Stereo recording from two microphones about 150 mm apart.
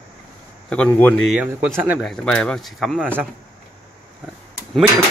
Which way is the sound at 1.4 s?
15° right (ahead or behind).